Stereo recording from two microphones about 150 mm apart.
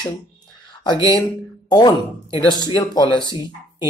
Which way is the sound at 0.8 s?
30° left (ahead or behind).